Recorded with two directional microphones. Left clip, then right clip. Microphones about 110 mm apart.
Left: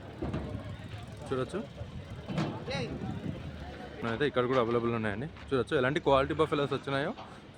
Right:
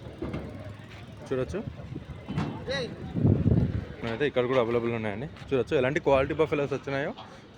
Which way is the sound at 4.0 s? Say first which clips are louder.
Right 3 dB; 5° left (ahead or behind).